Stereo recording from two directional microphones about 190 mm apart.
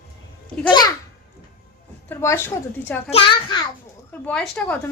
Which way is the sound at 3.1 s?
25° left (ahead or behind).